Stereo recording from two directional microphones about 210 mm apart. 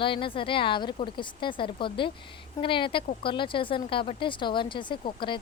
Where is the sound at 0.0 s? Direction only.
25° left (ahead or behind).